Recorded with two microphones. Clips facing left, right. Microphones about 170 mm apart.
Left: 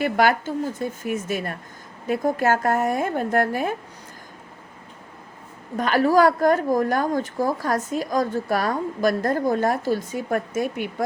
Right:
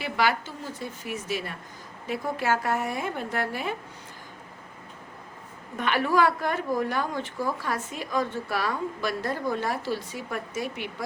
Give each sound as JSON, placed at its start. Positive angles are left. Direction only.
{"t": 0.0, "sound": "a woman's voice", "side_deg": 50}
{"t": 5.7, "sound": "a woman's voice", "side_deg": 40}